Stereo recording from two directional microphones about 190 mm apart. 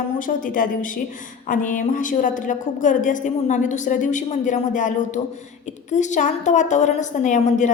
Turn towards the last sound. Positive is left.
turn(degrees=40)  # may be behind; listen again after turning